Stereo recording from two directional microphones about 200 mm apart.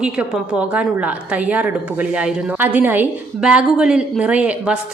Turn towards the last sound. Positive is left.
turn(degrees=-5)  # may be behind; listen again after turning